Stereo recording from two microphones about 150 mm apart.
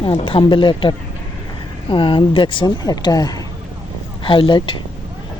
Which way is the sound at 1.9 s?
35° left (ahead or behind).